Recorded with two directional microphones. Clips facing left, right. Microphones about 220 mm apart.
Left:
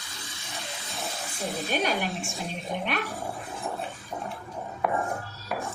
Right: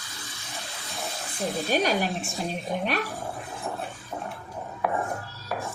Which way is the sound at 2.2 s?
Centre (ahead or behind).